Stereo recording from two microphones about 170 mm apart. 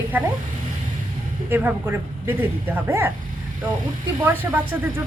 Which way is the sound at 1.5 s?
10° right (ahead or behind).